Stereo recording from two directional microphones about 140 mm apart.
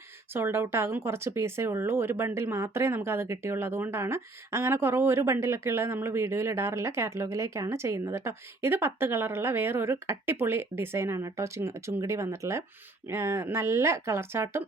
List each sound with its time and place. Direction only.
0.3 s speech: 15° right (ahead or behind)